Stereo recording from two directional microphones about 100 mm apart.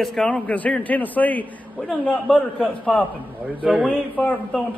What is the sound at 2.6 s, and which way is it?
A man's voice, 10° left (ahead or behind).